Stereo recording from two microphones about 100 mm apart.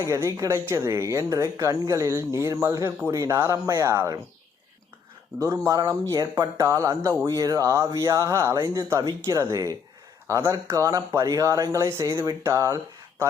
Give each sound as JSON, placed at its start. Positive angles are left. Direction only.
{"t": 0.0, "sound": "speech", "side_deg": -30}
{"t": 5.4, "sound": "speech", "side_deg": -30}